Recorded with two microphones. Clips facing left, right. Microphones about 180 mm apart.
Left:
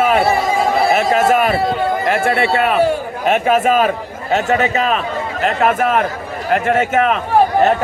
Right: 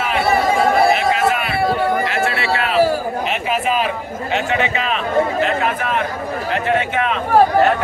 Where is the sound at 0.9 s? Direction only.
45° left (ahead or behind).